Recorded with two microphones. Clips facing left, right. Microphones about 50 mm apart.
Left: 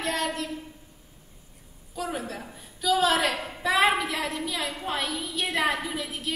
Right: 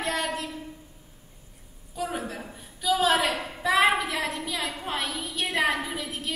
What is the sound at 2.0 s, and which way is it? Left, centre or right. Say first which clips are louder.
A woman's voice: right 1 dB; centre.